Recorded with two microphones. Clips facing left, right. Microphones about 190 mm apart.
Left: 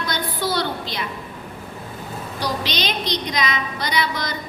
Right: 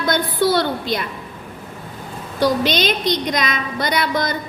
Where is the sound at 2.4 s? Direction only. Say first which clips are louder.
Right 9 dB; 50° right (ahead or behind).